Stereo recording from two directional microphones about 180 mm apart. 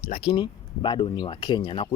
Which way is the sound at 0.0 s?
35° left (ahead or behind).